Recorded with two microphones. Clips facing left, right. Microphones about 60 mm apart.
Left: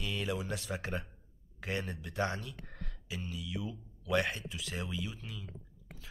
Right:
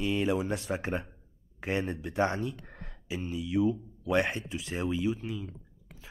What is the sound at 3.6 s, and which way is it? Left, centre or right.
Speech, right.